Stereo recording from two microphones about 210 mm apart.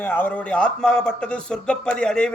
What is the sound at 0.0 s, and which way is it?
Speech, 10° left (ahead or behind).